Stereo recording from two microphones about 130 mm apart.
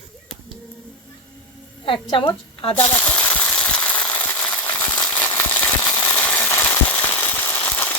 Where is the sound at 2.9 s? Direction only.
10° left (ahead or behind).